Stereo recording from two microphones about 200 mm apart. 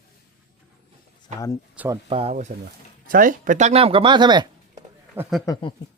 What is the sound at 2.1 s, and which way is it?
Speech, 30° right (ahead or behind).